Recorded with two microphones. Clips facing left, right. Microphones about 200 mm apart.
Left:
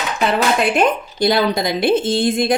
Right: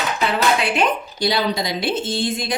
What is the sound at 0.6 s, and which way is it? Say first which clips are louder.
A woman's voice: left 4 dB; 50° left (ahead or behind).